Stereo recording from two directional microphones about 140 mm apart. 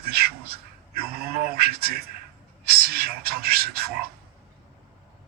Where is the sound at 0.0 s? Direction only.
90° right.